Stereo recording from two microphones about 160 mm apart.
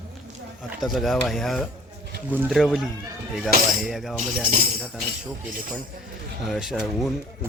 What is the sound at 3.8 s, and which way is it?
Speech, centre (ahead or behind).